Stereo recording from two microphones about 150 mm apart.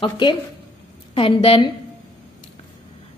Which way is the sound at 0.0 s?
30° left (ahead or behind).